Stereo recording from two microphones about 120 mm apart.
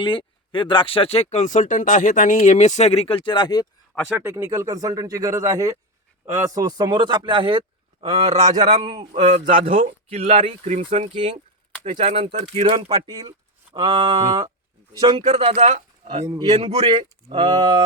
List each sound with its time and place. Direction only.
0.0 s speech: 45° left (ahead or behind)
4.1 s speech: 20° right (ahead or behind); by 7.6 s 45° right (ahead or behind)
8.0 s speech: 60° right (ahead or behind)
8.8 s speech: 50° right (ahead or behind)
9.2 s speech: 70° right (ahead or behind); by 11.1 s 85° right
11.8 s speech: 65° right (ahead or behind)
12.7 s speech: 35° right (ahead or behind)
15.3 s speech: 55° right (ahead or behind)
16.2 s speech: 25° right (ahead or behind)
16.6 s speech: 65° right (ahead or behind); by 17.8 s 40° right (ahead or behind)